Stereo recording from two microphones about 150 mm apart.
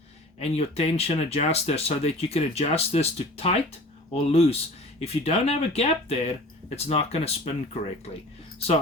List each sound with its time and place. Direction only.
0.3 s speech: 45° left (ahead or behind)